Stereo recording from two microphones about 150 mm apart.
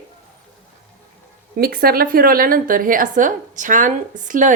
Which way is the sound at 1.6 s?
90° right.